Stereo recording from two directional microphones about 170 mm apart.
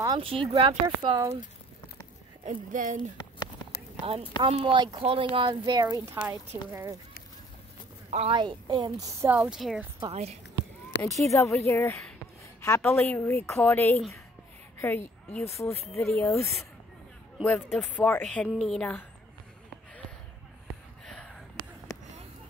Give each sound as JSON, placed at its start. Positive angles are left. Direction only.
{"t": 0.0, "sound": "speech", "side_deg": -30}
{"t": 2.4, "sound": "speech", "side_deg": -50}
{"t": 4.4, "sound": "speech", "side_deg": -30}
{"t": 8.1, "sound": "speech", "side_deg": -35}
{"t": 9.3, "sound": "speech", "side_deg": -5}
{"t": 10.1, "sound": "speech", "side_deg": -40}
{"t": 11.0, "sound": "a woman's voice", "side_deg": 20}
{"t": 17.4, "sound": "a woman's voice", "side_deg": 0}
{"t": 21.0, "sound": "a sound", "side_deg": 5}